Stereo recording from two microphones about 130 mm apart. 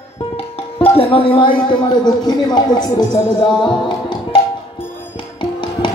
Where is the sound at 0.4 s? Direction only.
50° left (ahead or behind).